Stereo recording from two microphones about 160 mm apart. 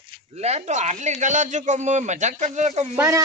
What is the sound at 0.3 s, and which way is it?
Speech, 40° right (ahead or behind).